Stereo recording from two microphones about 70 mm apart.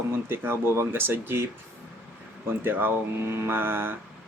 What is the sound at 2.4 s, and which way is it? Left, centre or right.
A man's voice, right.